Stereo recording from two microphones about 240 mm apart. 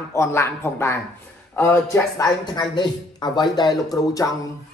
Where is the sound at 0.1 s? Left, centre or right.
Centre.